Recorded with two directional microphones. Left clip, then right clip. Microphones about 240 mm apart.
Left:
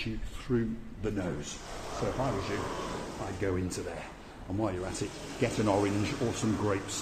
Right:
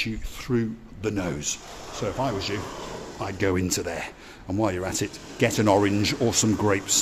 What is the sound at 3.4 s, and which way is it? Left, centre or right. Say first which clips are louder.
Speech: right 9 dB; right.